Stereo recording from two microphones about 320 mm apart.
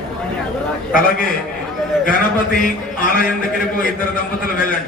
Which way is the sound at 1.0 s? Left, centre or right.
Left.